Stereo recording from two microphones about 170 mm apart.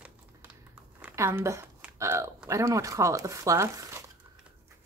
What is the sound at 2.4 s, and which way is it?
Speech, 20° right (ahead or behind).